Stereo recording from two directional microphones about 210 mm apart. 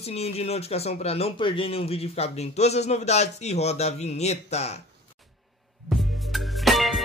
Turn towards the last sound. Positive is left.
turn(degrees=0)  # may be behind; listen again after turning